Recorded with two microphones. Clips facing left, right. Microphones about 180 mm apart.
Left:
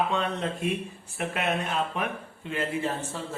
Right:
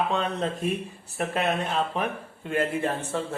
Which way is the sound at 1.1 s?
35° right (ahead or behind).